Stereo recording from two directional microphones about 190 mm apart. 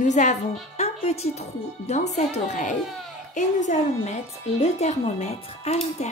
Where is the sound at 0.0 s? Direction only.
40° left (ahead or behind).